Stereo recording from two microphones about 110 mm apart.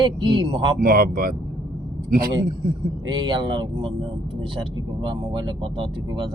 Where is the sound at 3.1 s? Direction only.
40° right (ahead or behind).